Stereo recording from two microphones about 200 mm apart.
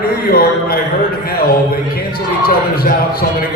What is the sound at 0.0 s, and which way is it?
Speech, 50° left (ahead or behind).